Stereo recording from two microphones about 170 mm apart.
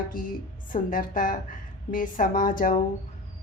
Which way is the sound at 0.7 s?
55° left (ahead or behind).